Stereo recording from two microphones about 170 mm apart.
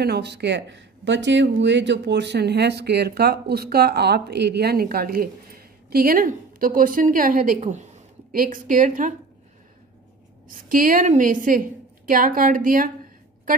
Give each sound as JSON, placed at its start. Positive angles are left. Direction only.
{"t": 0.0, "sound": "speech", "side_deg": -75}
{"t": 10.5, "sound": "a woman's voice", "side_deg": -55}